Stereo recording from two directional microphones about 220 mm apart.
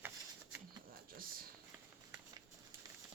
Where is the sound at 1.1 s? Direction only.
40° right (ahead or behind).